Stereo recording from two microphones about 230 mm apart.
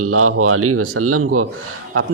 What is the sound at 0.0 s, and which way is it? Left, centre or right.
Speech, right.